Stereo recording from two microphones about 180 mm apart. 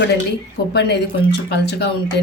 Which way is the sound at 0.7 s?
65° left (ahead or behind).